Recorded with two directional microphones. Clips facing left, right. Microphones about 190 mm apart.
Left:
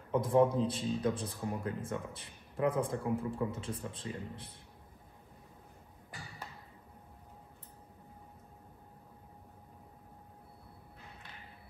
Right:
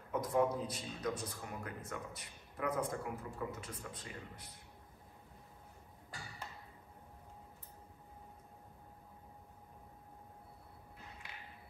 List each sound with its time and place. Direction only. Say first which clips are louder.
0.1 s a man's voice: left 6 dB; 30° left (ahead or behind)